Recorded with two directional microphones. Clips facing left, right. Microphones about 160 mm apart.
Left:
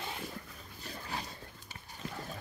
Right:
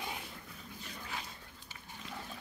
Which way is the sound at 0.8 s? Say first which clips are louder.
Left 4 dB; 40° left (ahead or behind).